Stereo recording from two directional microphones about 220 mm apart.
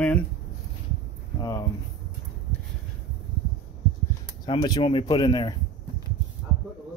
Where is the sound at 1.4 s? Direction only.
15° left (ahead or behind).